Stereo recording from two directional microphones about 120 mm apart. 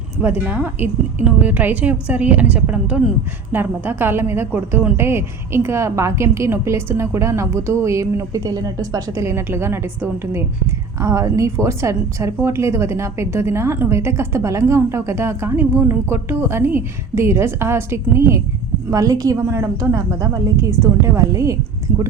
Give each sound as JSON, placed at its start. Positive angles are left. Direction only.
{"t": 0.2, "sound": "a woman's voice", "side_deg": -15}